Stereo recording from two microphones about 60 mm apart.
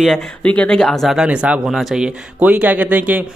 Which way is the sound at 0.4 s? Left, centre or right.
Left.